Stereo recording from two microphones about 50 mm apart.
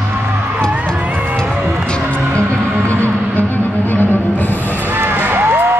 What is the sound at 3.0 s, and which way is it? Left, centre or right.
Music, left.